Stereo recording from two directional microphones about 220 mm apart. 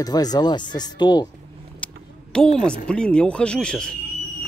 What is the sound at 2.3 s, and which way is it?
Speech, 5° left (ahead or behind).